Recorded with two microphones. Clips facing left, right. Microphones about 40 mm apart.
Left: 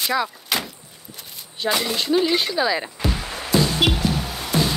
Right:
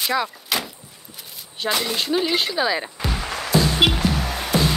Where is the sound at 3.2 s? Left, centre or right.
Right.